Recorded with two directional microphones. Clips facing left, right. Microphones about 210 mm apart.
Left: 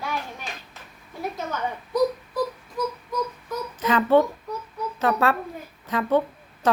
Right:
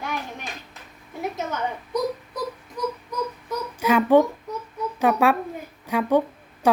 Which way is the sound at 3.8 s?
10° right (ahead or behind).